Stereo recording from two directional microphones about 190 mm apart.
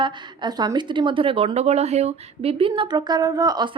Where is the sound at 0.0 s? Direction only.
20° right (ahead or behind).